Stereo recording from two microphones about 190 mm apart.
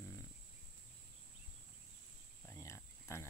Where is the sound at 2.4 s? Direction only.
15° left (ahead or behind).